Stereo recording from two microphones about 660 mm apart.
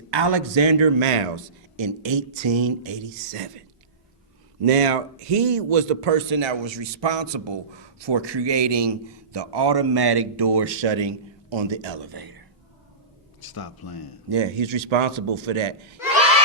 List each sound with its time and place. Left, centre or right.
0.1 s a man's voice: right
4.7 s a man's voice: right
13.4 s speech: left
14.3 s a man's voice: right